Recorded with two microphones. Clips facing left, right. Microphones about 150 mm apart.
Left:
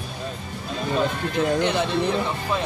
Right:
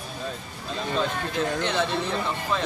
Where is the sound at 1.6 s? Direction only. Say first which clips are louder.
Left 3 dB; 15° left (ahead or behind).